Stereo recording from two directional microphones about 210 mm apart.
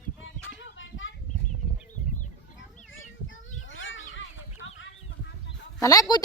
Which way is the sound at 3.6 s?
65° left (ahead or behind).